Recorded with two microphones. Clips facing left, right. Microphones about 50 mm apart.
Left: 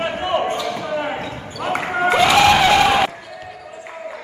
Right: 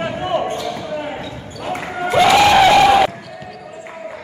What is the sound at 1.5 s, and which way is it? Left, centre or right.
Basketball bounce, left.